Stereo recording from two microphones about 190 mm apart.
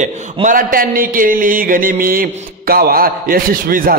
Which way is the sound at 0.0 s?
40° right (ahead or behind).